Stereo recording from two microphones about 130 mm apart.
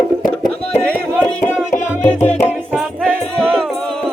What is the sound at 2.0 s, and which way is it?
Speech, 10° left (ahead or behind).